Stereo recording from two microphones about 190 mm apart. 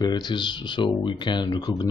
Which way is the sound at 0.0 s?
20° left (ahead or behind).